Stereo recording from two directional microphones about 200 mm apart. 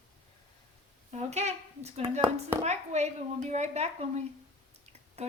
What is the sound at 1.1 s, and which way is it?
A woman's voice, 35° right (ahead or behind).